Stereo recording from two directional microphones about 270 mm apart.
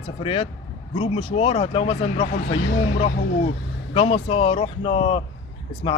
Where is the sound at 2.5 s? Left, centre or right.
Left.